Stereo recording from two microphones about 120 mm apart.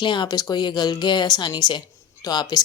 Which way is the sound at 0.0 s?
40° left (ahead or behind).